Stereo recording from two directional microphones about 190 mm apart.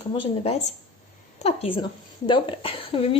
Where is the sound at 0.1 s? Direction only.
35° left (ahead or behind).